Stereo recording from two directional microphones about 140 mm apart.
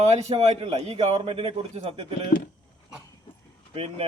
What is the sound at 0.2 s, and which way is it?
Speech, 50° right (ahead or behind).